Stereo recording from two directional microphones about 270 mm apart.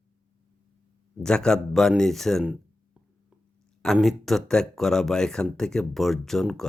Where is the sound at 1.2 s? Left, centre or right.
Centre.